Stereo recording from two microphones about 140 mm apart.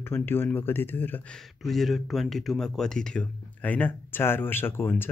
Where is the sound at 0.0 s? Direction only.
15° left (ahead or behind).